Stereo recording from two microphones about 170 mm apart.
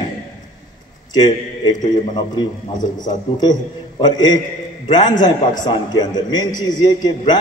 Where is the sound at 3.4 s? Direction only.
25° left (ahead or behind).